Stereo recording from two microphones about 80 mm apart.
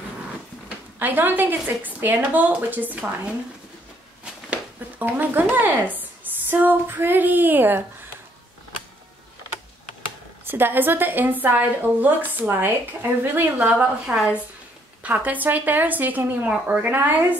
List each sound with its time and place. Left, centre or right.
0.9 s speech: right
4.2 s a sound: centre
6.5 s speech: right
10.4 s speech: right
14.0 s speech: centre
15.0 s speech: right